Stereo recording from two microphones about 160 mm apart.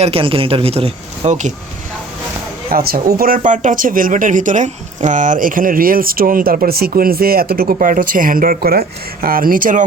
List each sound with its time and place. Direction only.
0.0 s speech: 35° right (ahead or behind)
2.7 s a woman's voice: 65° right (ahead or behind)